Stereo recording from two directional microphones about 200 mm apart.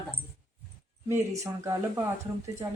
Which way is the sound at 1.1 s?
15° right (ahead or behind).